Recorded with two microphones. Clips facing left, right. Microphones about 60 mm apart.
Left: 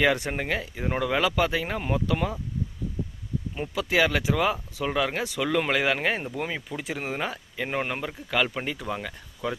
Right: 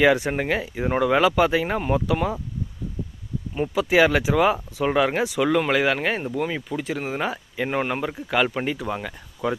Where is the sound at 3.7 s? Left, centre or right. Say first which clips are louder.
Right 5 dB; centre.